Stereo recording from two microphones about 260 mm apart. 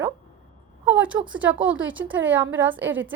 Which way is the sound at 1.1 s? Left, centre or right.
Centre.